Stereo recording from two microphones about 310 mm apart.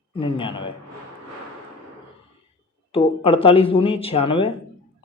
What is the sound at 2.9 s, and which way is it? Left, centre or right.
Speech, centre.